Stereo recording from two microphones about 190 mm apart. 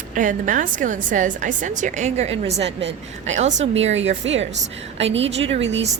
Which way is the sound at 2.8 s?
70° right (ahead or behind).